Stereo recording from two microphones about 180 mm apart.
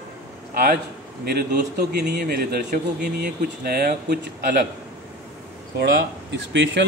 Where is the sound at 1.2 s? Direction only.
60° right (ahead or behind).